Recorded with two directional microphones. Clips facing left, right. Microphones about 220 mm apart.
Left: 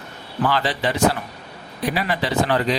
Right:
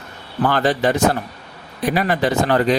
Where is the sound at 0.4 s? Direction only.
45° right (ahead or behind).